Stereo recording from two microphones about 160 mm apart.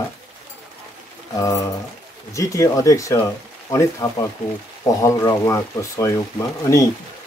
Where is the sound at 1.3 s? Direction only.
20° left (ahead or behind).